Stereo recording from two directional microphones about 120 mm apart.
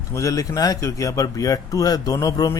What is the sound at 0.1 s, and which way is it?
Speech, 25° left (ahead or behind).